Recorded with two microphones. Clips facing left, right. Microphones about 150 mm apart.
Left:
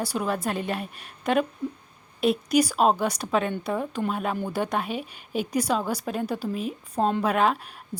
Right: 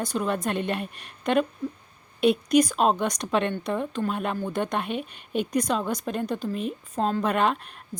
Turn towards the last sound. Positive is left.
turn(degrees=5)  # may be behind; listen again after turning